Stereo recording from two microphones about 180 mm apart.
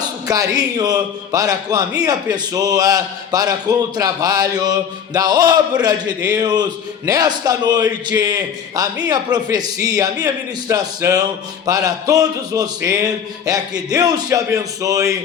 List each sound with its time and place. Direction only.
0.3 s a man's voice: 20° right (ahead or behind)